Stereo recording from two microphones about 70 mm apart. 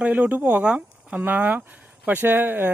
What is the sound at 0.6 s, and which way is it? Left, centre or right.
Speech, centre.